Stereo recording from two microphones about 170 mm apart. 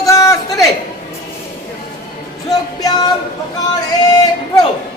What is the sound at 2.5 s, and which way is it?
Music, 25° left (ahead or behind).